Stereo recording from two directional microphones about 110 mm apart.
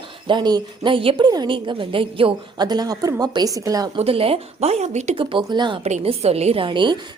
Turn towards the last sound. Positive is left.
turn(degrees=-45)  # may be behind; listen again after turning